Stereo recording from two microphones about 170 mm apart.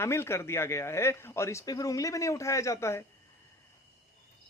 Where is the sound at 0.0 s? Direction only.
15° left (ahead or behind).